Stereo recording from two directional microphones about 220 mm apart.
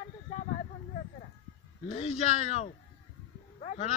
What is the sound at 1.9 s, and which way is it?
A man's voice, 30° left (ahead or behind).